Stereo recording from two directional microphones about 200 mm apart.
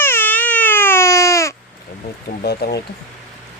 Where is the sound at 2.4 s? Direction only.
50° left (ahead or behind).